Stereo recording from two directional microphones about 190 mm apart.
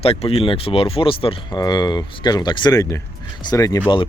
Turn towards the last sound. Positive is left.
turn(degrees=20)  # may be behind; listen again after turning